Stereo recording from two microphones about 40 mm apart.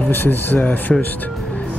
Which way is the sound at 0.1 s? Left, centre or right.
Left.